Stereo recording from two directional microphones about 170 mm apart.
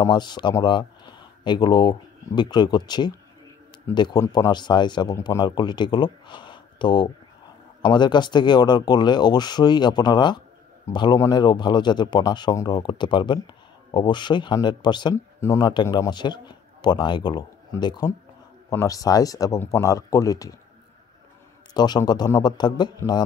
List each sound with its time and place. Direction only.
0.0 s speech: 25° left (ahead or behind)
21.7 s speech: 25° left (ahead or behind)